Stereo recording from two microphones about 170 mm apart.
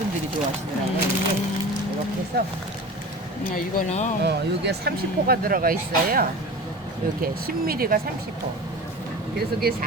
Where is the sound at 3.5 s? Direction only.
50° left (ahead or behind).